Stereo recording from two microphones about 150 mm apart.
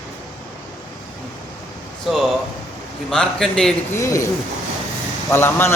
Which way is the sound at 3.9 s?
20° left (ahead or behind).